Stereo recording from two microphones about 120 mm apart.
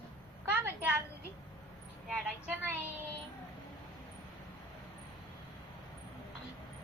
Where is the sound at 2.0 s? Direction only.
15° right (ahead or behind).